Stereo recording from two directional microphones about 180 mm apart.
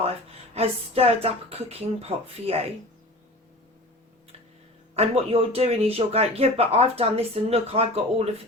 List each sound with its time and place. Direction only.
0.5 s speech: 35° right (ahead or behind)
4.9 s speech: 35° right (ahead or behind)